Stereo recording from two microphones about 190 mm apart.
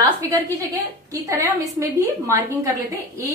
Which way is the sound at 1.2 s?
15° right (ahead or behind).